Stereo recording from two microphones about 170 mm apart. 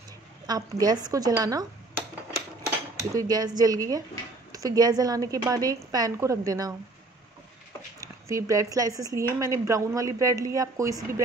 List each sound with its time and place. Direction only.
0.5 s speech: 20° right (ahead or behind)
3.2 s speech: 20° right (ahead or behind)
8.0 s speech: 20° right (ahead or behind)